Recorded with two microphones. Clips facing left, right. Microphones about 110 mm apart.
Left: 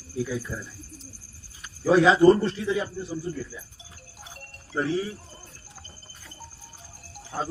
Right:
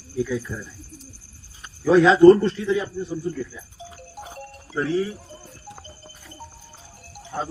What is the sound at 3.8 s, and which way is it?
Music, 65° right (ahead or behind).